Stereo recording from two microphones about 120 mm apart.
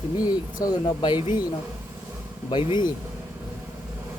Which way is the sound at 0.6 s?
35° left (ahead or behind).